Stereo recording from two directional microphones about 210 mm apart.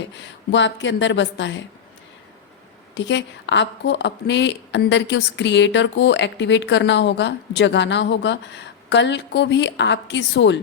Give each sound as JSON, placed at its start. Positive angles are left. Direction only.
{"t": 0.1, "sound": "a woman's voice", "side_deg": 60}
{"t": 2.9, "sound": "a woman's voice", "side_deg": 60}